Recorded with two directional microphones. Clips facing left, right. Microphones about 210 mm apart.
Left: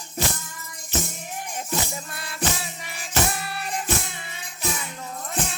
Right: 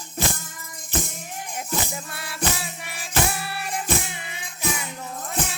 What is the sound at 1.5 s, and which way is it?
Music, 5° right (ahead or behind).